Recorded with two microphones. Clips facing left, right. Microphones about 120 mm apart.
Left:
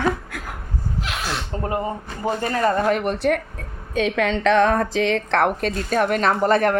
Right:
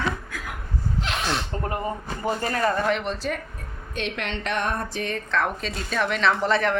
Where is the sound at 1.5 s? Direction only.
20° left (ahead or behind).